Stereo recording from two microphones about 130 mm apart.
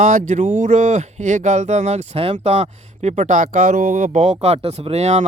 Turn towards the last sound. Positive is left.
turn(degrees=-55)  # may be behind; listen again after turning